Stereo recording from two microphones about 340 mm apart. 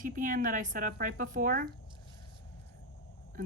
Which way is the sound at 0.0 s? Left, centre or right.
Right.